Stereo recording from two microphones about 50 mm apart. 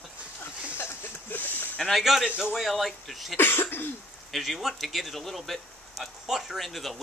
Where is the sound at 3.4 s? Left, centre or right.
Left.